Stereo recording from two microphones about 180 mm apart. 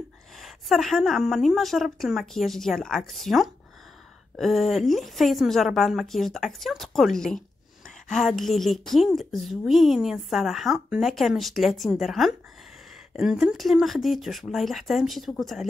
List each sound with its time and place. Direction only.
0.4 s a woman's voice: centre (ahead or behind)